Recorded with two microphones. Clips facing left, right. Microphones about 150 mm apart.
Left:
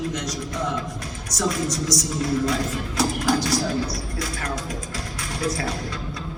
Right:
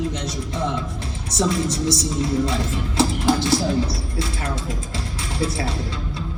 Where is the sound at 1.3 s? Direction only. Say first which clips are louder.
Right 3 dB; 25° right (ahead or behind).